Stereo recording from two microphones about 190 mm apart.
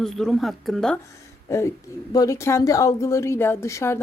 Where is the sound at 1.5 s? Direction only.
15° left (ahead or behind).